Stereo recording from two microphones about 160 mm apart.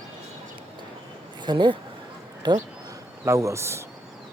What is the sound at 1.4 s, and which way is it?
Speech, 30° right (ahead or behind).